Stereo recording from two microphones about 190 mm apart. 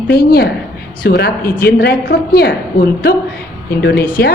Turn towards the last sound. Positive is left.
turn(degrees=45)  # may be behind; listen again after turning